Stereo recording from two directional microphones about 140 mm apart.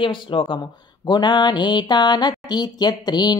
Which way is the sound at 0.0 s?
40° left (ahead or behind).